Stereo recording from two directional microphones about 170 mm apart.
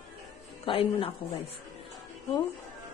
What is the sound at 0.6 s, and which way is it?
Speech, 30° left (ahead or behind).